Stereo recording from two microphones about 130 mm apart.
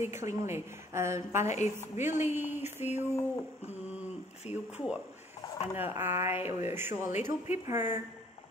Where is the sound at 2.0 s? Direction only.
65° left (ahead or behind).